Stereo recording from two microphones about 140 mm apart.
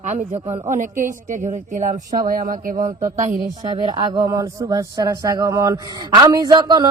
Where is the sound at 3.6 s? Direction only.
35° right (ahead or behind).